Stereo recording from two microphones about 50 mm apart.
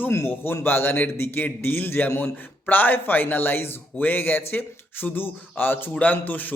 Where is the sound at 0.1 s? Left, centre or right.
Left.